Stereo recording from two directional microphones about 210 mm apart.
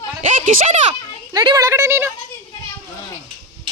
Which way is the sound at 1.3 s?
20° right (ahead or behind).